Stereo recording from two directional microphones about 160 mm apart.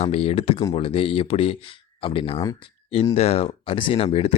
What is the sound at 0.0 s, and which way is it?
Speech, 40° left (ahead or behind).